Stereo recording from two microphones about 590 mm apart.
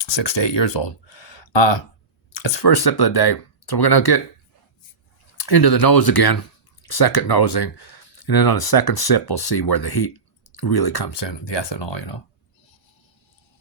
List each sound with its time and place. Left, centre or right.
0.0 s speech: left
5.4 s speech: left